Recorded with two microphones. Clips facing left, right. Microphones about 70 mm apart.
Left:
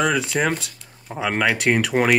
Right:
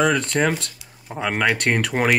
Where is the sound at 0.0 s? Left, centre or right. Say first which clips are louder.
Right 1 dB; centre.